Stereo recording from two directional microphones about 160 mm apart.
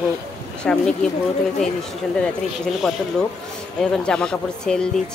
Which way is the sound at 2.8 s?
5° left (ahead or behind).